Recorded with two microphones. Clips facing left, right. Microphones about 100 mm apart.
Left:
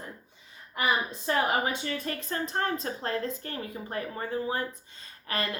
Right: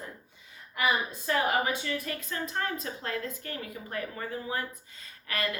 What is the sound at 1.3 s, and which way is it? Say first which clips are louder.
A woman's voice: left 1 dB; 30° left (ahead or behind).